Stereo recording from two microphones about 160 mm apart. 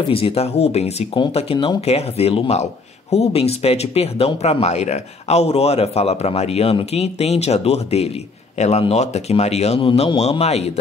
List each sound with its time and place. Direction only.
0.1 s speech: 40° left (ahead or behind)